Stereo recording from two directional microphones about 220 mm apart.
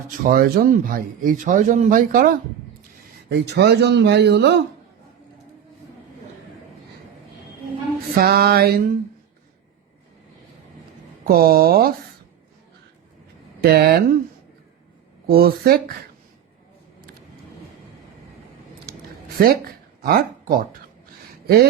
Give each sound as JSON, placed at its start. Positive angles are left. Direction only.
{"t": 0.2, "sound": "a man's voice", "side_deg": -40}
{"t": 8.1, "sound": "speech", "side_deg": -45}
{"t": 11.3, "sound": "speech", "side_deg": -45}
{"t": 13.6, "sound": "speech", "side_deg": -45}
{"t": 15.3, "sound": "speech", "side_deg": -45}
{"t": 19.4, "sound": "speech", "side_deg": -40}